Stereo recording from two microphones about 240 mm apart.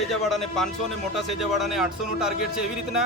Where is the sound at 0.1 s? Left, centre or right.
Centre.